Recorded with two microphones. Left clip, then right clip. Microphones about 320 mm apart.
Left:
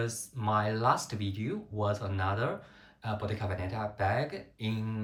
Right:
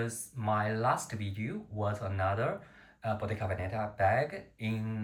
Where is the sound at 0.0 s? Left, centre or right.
Centre.